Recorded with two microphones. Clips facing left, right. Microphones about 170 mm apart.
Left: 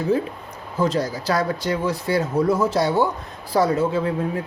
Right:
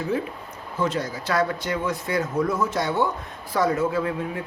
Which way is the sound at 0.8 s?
35° left (ahead or behind).